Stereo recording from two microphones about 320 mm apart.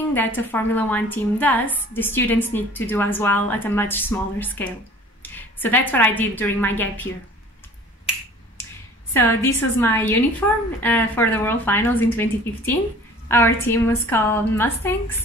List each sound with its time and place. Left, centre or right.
0.1 s a woman's voice: centre
9.1 s a woman's voice: centre